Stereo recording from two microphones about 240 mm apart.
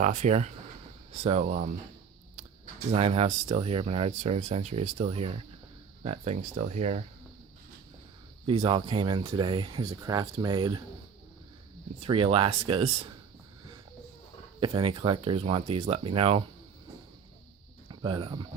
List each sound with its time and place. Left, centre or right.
0.0 s speech: right
2.9 s speech: right
8.4 s speech: right
11.9 s speech: right
14.6 s speech: right
17.8 s a sound: centre